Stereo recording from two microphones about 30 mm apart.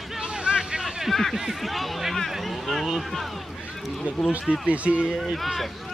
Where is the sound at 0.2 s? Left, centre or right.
Right.